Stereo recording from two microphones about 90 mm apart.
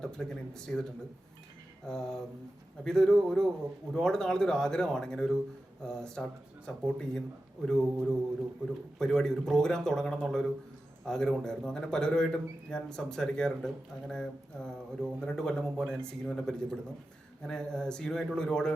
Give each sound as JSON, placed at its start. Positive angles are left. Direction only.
{"t": 0.0, "sound": "speech", "side_deg": 5}